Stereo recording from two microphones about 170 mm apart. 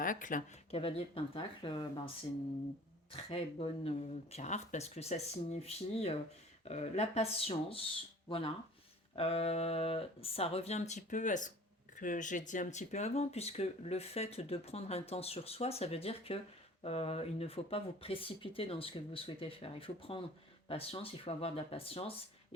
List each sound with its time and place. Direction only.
0.0 s speech: 50° left (ahead or behind)
0.7 s speech: 35° left (ahead or behind)
3.1 s speech: 35° left (ahead or behind)